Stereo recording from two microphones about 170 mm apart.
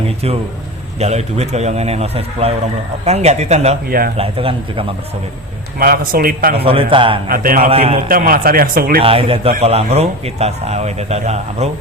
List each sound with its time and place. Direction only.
0.9 s a man's voice: 40° right (ahead or behind)
3.8 s speech: 60° right (ahead or behind)
4.2 s a man's voice: 30° right (ahead or behind)
5.8 s speech: 60° right (ahead or behind)
6.7 s a man's voice: 30° right (ahead or behind)
7.3 s speech: 55° right (ahead or behind)
7.7 s a man's voice: 35° right (ahead or behind)
8.0 s speech: 55° right (ahead or behind)
9.0 s a man's voice: 35° right (ahead or behind)